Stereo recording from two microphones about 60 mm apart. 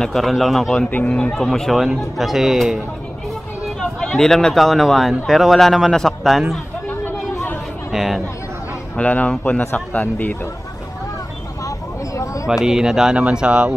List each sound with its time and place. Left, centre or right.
0.0 s a man's voice: centre
0.8 s speech: left
1.3 s a man's voice: centre
4.0 s a man's voice: centre
7.9 s speech: centre
8.9 s speech: left
11.6 s vehicle: left
12.4 s speech: centre